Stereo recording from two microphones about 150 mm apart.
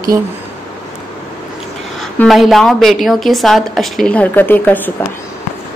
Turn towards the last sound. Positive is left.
turn(degrees=10)  # may be behind; listen again after turning